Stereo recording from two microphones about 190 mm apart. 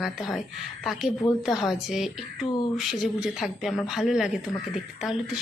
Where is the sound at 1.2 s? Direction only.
25° left (ahead or behind).